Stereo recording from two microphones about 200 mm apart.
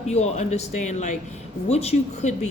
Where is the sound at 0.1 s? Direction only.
35° left (ahead or behind).